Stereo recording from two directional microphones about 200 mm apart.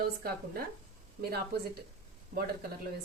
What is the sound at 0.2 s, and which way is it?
Speech, 50° right (ahead or behind).